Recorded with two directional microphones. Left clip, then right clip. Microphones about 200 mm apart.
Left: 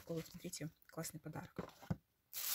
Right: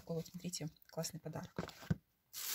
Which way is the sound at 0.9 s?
5° left (ahead or behind).